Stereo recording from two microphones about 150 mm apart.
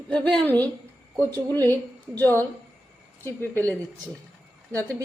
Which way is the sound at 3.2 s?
15° left (ahead or behind).